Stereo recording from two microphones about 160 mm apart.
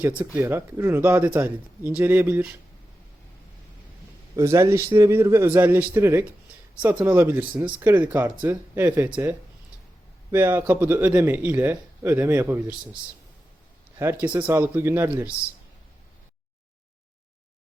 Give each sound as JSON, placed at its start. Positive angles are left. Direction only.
{"t": 0.3, "sound": "speech", "side_deg": -15}
{"t": 4.4, "sound": "speech", "side_deg": -20}
{"t": 10.3, "sound": "speech", "side_deg": -15}
{"t": 14.0, "sound": "speech", "side_deg": -15}